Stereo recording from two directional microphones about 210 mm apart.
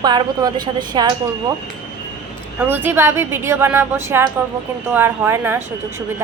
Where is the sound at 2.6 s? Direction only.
10° right (ahead or behind).